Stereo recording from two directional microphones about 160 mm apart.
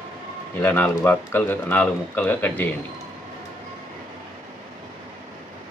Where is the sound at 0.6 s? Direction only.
15° left (ahead or behind).